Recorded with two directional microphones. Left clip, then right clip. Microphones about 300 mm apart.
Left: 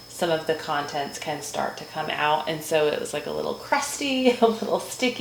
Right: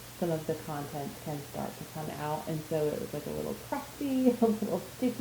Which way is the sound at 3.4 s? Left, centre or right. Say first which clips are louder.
Left 12 dB; centre.